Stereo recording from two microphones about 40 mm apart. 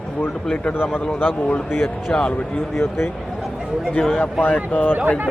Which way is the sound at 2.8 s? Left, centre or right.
Left.